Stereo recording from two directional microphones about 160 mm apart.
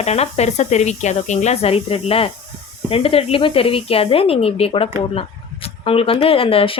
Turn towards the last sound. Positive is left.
turn(degrees=35)  # may be behind; listen again after turning